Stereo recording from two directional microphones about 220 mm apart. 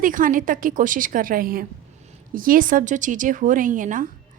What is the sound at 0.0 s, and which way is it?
A woman's voice, 35° right (ahead or behind).